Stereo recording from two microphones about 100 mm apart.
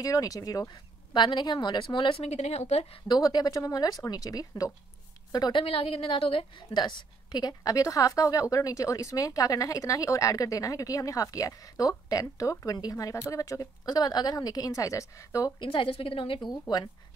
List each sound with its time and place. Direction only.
0.0 s a woman's voice: 35° left (ahead or behind)
0.7 s speech: 50° left (ahead or behind)
2.2 s speech: 90° left
3.1 s a woman's voice: 40° left (ahead or behind)
5.3 s a woman's voice: 50° left (ahead or behind); by 15.5 s 30° left (ahead or behind)
15.6 s a woman's voice: 60° left (ahead or behind)
16.4 s speech: 45° left (ahead or behind)